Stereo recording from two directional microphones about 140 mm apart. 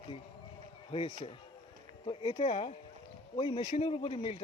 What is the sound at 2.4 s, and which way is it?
Speech, 45° left (ahead or behind).